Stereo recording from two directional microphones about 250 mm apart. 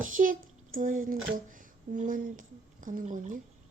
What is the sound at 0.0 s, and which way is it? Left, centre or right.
Speech, right.